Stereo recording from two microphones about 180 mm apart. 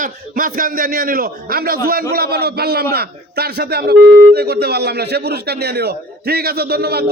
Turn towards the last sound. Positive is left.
turn(degrees=-60)  # may be behind; listen again after turning